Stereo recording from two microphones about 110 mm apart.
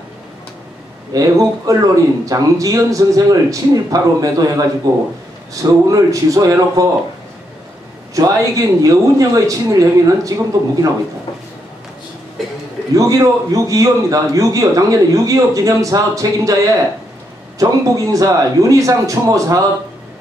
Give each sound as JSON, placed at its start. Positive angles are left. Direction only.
{"t": 1.1, "sound": "a man's voice", "side_deg": -30}
{"t": 8.1, "sound": "a man's voice", "side_deg": -30}
{"t": 12.4, "sound": "music", "side_deg": 0}
{"t": 12.9, "sound": "a man's voice", "side_deg": -30}
{"t": 17.6, "sound": "a man's voice", "side_deg": -30}